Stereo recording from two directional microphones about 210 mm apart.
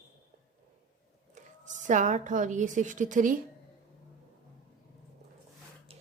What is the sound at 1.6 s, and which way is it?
A woman's voice, 35° right (ahead or behind).